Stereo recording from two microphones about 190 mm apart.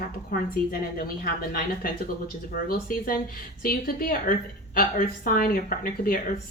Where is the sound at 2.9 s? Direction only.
50° left (ahead or behind).